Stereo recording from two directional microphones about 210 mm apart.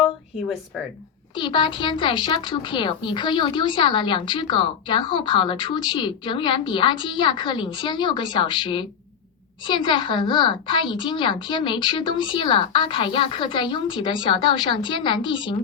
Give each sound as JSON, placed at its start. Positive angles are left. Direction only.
{"t": 1.4, "sound": "speech", "side_deg": 20}